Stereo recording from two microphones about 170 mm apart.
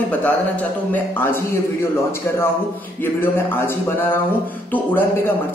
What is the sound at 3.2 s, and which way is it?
Speech, 15° left (ahead or behind).